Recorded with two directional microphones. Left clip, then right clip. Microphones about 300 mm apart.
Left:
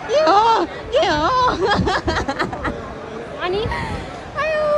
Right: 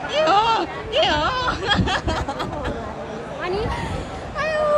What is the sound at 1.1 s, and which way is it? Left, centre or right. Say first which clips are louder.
Snicker: left 4 dB; centre.